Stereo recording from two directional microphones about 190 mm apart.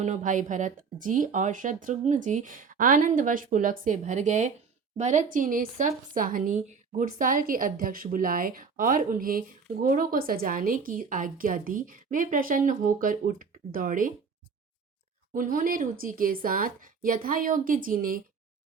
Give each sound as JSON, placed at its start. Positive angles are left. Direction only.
{"t": 0.0, "sound": "speech", "side_deg": -40}
{"t": 15.3, "sound": "speech", "side_deg": -45}